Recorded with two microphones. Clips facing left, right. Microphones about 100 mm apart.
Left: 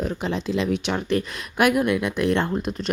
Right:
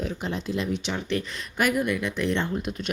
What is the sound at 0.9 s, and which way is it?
Speech, 55° left (ahead or behind).